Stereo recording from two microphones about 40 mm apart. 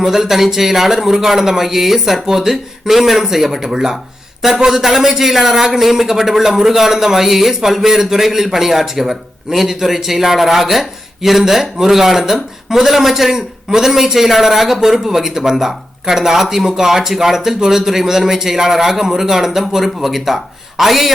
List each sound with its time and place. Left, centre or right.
0.0 s a man's voice: centre